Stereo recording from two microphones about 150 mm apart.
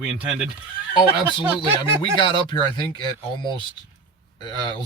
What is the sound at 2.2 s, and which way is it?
Speech, 30° left (ahead or behind).